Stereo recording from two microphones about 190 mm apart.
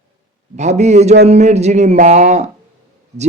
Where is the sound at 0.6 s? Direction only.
35° right (ahead or behind).